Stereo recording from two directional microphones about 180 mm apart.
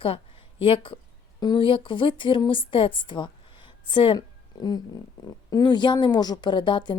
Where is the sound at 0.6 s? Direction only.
30° left (ahead or behind).